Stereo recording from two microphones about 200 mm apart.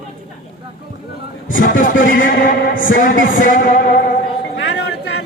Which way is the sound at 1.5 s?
45° left (ahead or behind).